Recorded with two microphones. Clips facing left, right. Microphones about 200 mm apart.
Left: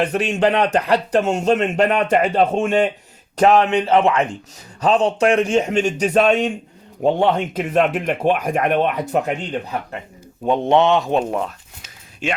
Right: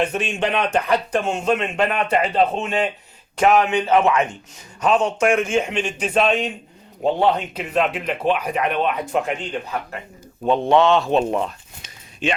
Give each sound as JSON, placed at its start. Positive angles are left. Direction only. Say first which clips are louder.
{"t": 0.3, "sound": "speech", "louder": "left 5 dB", "side_deg": 40}
{"t": 3.3, "sound": "speech", "louder": "left 2 dB", "side_deg": 35}
{"t": 10.4, "sound": "speech", "louder": "left 1 dB", "side_deg": 20}